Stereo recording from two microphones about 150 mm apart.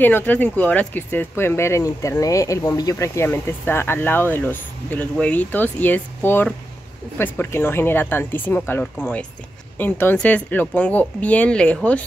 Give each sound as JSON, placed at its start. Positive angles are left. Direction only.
{"t": 0.0, "sound": "speech", "side_deg": 10}